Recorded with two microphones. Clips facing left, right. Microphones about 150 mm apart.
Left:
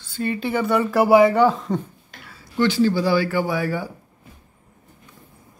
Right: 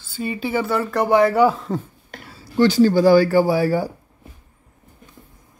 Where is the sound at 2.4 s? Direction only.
35° right (ahead or behind).